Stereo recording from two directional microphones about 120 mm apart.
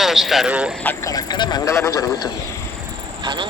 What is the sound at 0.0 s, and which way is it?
Speech, centre (ahead or behind).